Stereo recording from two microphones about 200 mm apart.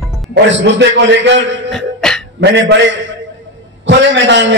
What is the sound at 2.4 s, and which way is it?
A man's voice, 60° right (ahead or behind).